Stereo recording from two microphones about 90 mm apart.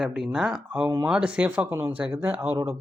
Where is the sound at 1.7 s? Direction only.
25° right (ahead or behind).